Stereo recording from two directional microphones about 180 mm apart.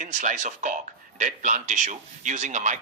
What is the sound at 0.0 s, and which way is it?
Speech, 40° right (ahead or behind).